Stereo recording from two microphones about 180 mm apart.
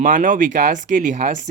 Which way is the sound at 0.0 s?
50° right (ahead or behind).